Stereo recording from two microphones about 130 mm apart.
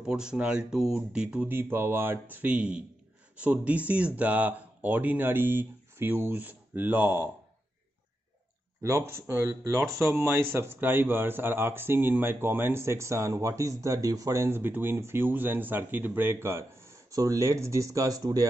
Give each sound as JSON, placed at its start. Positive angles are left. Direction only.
{"t": 0.0, "sound": "speech", "side_deg": -5}
{"t": 8.8, "sound": "speech", "side_deg": -20}